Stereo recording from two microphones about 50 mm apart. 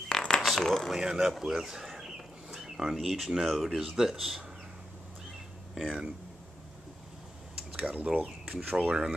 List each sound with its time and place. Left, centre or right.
0.4 s a sound: centre
0.9 s speech: centre
5.8 s speech: centre
7.7 s speech: right